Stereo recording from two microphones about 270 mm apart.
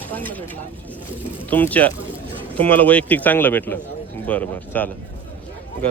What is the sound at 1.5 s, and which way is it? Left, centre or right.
Speech, centre.